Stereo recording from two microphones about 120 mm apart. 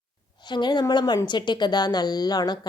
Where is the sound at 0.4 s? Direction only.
40° left (ahead or behind).